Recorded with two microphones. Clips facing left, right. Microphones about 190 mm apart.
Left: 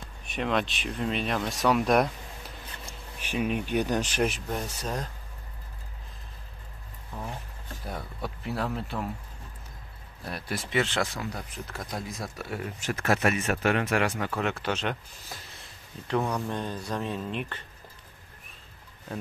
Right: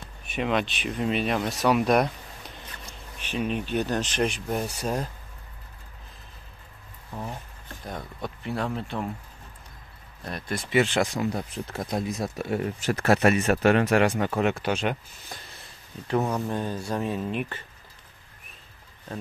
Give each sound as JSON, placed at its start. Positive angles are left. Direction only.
{"t": 0.3, "sound": "speech", "side_deg": -5}
{"t": 3.2, "sound": "speech", "side_deg": 10}
{"t": 4.5, "sound": "speech", "side_deg": -10}
{"t": 7.8, "sound": "speech", "side_deg": 5}
{"t": 10.2, "sound": "speech", "side_deg": 5}
{"t": 10.7, "sound": "speech", "side_deg": -15}
{"t": 11.3, "sound": "speech", "side_deg": -25}
{"t": 15.2, "sound": "a sound", "side_deg": 0}
{"t": 16.2, "sound": "speech", "side_deg": -25}
{"t": 16.4, "sound": "speech", "side_deg": -5}